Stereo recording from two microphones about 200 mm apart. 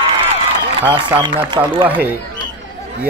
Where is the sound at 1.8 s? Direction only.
10° right (ahead or behind).